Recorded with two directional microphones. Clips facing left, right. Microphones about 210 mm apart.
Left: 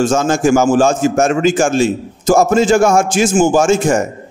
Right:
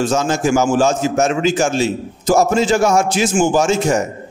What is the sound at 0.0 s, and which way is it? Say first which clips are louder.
A man's voice: left 4 dB; 50° left (ahead or behind).